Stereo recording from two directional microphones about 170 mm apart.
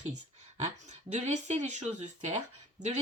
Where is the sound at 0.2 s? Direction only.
45° right (ahead or behind).